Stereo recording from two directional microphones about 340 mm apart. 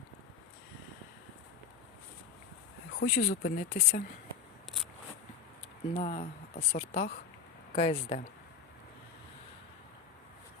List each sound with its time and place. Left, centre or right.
2.9 s speech: left
5.9 s speech: centre